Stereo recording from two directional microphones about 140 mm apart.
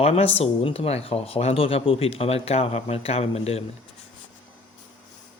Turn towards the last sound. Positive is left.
turn(degrees=45)  # may be behind; listen again after turning